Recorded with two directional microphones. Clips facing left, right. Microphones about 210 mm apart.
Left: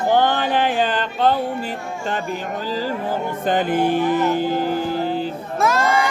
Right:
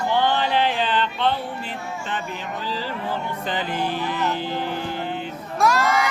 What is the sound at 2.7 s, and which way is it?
Music, 45° left (ahead or behind).